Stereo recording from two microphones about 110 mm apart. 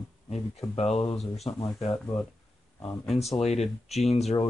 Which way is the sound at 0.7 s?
75° left (ahead or behind).